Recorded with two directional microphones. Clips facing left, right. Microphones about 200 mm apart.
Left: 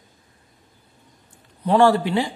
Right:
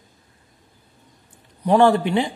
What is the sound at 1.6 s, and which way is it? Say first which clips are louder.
Speech: right 1 dB; 15° right (ahead or behind).